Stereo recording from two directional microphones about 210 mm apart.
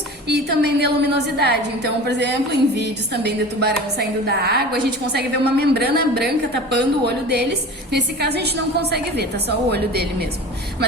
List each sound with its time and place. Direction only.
0.3 s a woman's voice: 50° right (ahead or behind)